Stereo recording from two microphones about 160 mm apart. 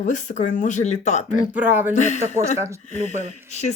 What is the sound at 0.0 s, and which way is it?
Speech, 50° left (ahead or behind).